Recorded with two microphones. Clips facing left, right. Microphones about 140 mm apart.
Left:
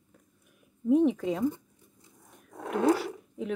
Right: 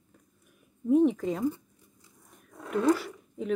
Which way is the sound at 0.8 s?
Centre (ahead or behind).